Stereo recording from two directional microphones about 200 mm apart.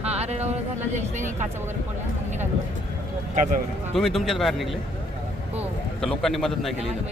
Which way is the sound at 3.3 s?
40° right (ahead or behind).